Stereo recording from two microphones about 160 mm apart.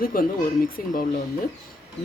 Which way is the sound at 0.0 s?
60° left (ahead or behind).